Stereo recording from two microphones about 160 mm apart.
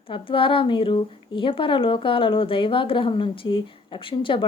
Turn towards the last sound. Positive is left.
turn(degrees=35)  # may be behind; listen again after turning